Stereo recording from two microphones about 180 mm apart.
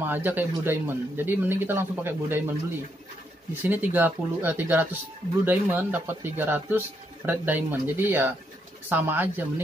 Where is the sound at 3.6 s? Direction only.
10° right (ahead or behind).